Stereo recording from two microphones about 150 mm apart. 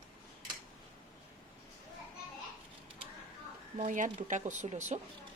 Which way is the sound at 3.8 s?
55° right (ahead or behind).